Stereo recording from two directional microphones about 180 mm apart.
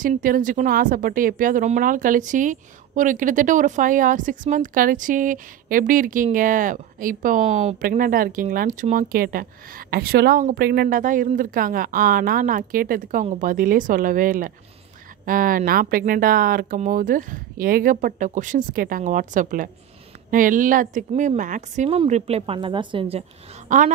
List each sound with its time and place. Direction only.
0.0 s speech: 50° right (ahead or behind)
10.9 s a woman's voice: 45° right (ahead or behind); by 23.2 s 30° right (ahead or behind)
23.7 s speech: 45° right (ahead or behind)